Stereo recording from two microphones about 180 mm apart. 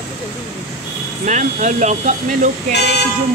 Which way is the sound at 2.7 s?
70° left (ahead or behind).